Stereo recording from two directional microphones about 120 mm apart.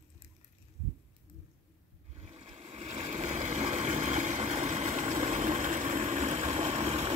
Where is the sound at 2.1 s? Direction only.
55° right (ahead or behind).